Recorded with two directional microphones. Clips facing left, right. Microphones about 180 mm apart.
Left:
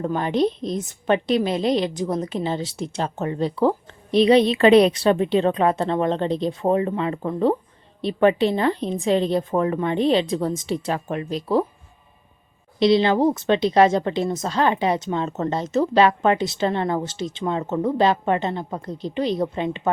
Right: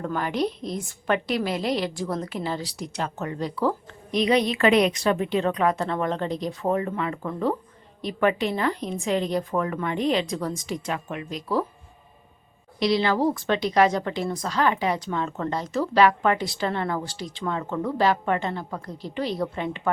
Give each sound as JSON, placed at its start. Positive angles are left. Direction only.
{"t": 0.0, "sound": "a woman's voice", "side_deg": 20}
{"t": 12.8, "sound": "a woman's voice", "side_deg": 25}